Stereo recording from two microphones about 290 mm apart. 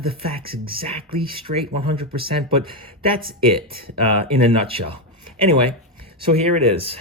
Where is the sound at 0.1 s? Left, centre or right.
Centre.